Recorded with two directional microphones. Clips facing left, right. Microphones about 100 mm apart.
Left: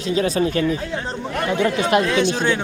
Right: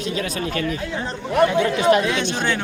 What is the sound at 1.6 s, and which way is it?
Speech, 25° left (ahead or behind).